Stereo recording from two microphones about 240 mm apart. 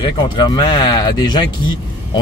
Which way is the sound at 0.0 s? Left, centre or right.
Centre.